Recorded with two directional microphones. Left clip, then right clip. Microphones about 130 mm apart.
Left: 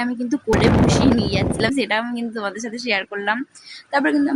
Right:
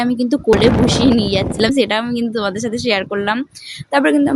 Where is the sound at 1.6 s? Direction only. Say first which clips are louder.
Right 5 dB; 30° right (ahead or behind).